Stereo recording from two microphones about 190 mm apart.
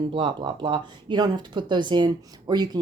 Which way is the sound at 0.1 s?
25° right (ahead or behind).